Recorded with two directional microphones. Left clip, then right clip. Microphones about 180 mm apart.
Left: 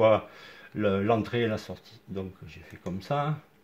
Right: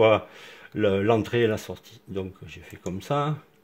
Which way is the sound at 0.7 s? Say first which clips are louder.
Right 4 dB; 85° right.